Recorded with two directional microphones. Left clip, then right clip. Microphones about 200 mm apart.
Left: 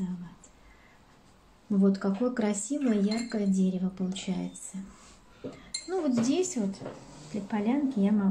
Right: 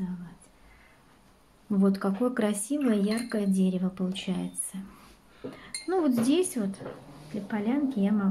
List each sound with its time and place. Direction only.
1.7 s speech: 25° right (ahead or behind)
7.4 s speech: 5° right (ahead or behind)